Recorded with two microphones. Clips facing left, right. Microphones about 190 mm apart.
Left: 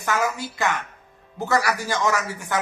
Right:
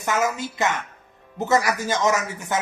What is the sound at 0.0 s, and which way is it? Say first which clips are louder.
A man's voice: right 1 dB; 20° right (ahead or behind).